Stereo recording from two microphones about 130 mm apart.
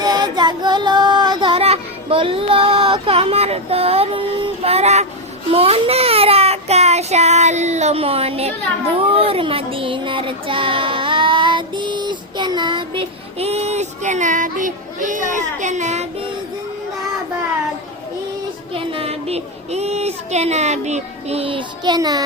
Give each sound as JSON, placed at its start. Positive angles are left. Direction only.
{"t": 0.0, "sound": "child singing", "side_deg": -30}
{"t": 18.7, "sound": "speech", "side_deg": -45}
{"t": 21.9, "sound": "music", "side_deg": -30}